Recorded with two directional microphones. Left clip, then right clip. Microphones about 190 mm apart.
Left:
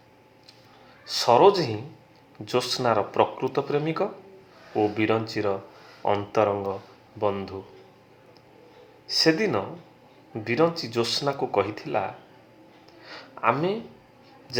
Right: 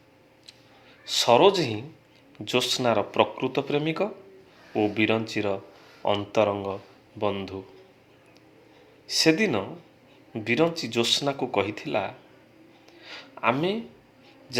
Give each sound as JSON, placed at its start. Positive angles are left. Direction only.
{"t": 1.0, "sound": "speech", "side_deg": -30}
{"t": 9.1, "sound": "speech", "side_deg": -30}
{"t": 13.0, "sound": "a sound", "side_deg": -30}